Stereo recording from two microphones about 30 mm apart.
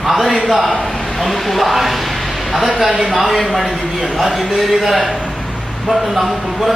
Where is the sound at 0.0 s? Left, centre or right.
Centre.